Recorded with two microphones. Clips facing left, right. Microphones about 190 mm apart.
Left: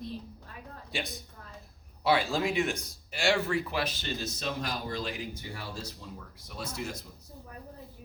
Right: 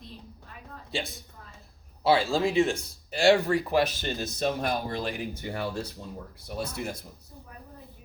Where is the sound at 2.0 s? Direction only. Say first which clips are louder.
Right 4 dB; 30° right (ahead or behind); by 5.9 s 65° right (ahead or behind).